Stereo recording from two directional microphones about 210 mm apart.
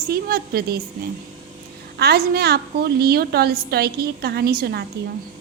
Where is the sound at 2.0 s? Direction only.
50° right (ahead or behind).